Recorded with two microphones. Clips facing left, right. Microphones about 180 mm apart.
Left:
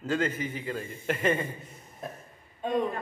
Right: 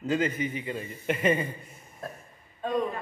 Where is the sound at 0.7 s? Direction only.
50° left (ahead or behind).